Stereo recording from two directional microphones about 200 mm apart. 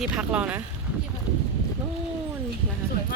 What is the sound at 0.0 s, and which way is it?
Speech, 5° right (ahead or behind).